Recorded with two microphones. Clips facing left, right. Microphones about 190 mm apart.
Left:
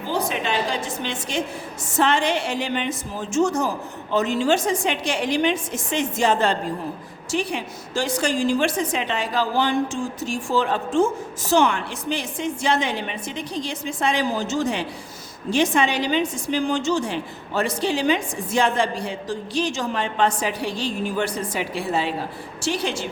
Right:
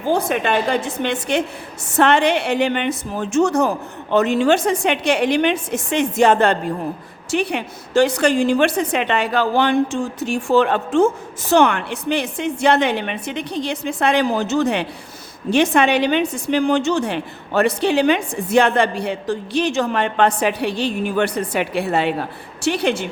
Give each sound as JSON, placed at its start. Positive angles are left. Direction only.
{"t": 0.1, "sound": "a woman's voice", "side_deg": -55}